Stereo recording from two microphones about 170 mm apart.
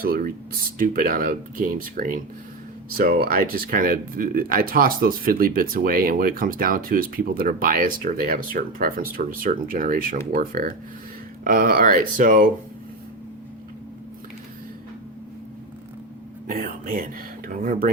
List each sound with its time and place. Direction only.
0.0 s speech: 60° right (ahead or behind)
16.5 s speech: 55° right (ahead or behind)